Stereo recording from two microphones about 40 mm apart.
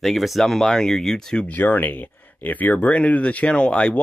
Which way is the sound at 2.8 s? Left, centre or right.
Left.